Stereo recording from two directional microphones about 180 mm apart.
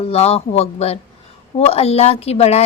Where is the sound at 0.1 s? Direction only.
35° left (ahead or behind).